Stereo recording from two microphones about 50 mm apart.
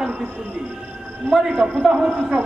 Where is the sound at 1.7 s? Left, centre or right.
Centre.